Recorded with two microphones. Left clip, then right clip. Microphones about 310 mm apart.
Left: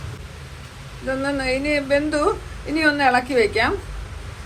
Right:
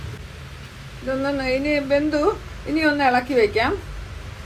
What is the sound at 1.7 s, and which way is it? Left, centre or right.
A woman's voice, left.